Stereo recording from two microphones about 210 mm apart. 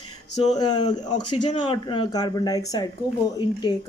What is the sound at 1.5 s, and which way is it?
A woman's voice, 25° left (ahead or behind).